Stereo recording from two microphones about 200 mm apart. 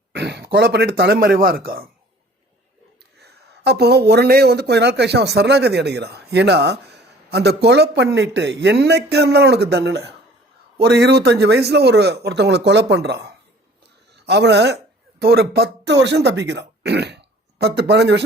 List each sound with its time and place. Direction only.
0.1 s speech: 55° right (ahead or behind)
3.2 s speech: 55° right (ahead or behind)